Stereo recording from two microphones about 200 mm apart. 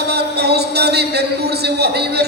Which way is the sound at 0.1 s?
55° right (ahead or behind).